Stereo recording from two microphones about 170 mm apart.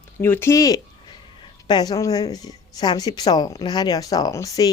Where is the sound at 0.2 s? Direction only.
15° left (ahead or behind).